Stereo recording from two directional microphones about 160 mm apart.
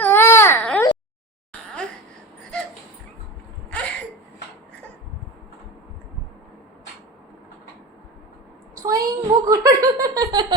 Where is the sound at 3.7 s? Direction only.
5° left (ahead or behind).